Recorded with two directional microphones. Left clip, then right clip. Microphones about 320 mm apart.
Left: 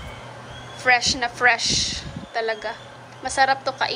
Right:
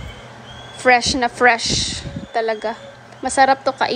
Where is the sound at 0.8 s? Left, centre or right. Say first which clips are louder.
Right 4 dB; centre.